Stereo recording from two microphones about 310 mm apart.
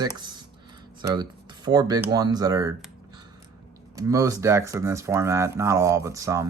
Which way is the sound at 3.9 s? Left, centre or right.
Centre.